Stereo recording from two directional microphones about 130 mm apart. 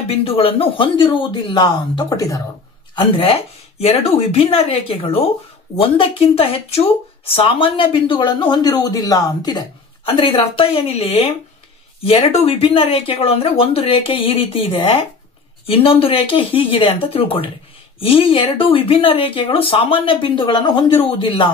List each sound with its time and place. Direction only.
0.1 s speech: 50° left (ahead or behind); by 2.4 s 25° left (ahead or behind)
3.0 s speech: 45° left (ahead or behind)